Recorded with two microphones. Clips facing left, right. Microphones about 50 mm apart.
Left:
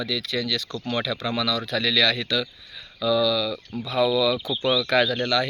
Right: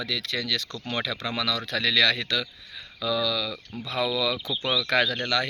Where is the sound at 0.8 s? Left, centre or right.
Right.